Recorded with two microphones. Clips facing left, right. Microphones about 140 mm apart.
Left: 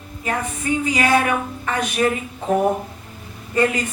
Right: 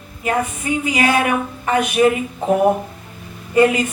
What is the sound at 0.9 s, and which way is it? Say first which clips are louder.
Speech: right 2 dB; 15° right (ahead or behind).